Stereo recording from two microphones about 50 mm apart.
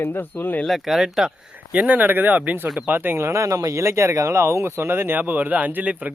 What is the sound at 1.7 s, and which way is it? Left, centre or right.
Speech, right.